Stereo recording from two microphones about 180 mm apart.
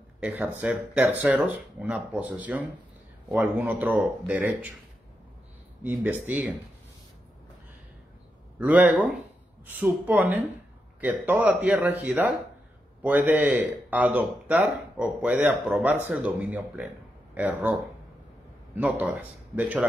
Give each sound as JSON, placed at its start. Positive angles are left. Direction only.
{"t": 0.2, "sound": "speech", "side_deg": -10}
{"t": 5.9, "sound": "speech", "side_deg": -10}
{"t": 8.5, "sound": "speech", "side_deg": -10}
{"t": 18.8, "sound": "speech", "side_deg": -10}